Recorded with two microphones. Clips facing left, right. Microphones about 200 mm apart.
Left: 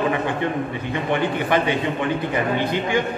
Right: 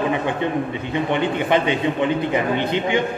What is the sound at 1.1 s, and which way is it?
Speech, 20° right (ahead or behind).